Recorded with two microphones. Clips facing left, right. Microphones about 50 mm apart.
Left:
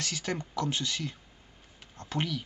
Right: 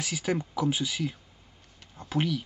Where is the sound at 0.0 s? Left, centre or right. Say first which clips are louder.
Right 4 dB; centre.